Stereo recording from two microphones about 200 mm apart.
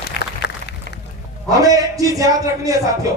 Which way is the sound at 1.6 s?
15° right (ahead or behind).